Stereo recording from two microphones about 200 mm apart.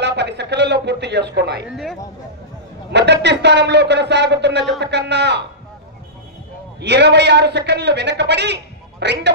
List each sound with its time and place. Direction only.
0.0 s a man's voice: 60° right (ahead or behind)
1.7 s speech: centre (ahead or behind)
2.9 s a man's voice: 60° right (ahead or behind)
6.8 s a man's voice: 60° right (ahead or behind)